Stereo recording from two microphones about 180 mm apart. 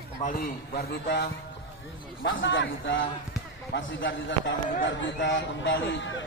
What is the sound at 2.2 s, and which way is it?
A man's voice, 90° left.